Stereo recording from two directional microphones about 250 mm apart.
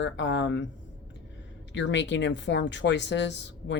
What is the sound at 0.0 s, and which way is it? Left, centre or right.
Speech, left.